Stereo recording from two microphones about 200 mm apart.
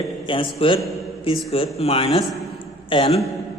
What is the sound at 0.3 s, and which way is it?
A man's voice, 25° left (ahead or behind).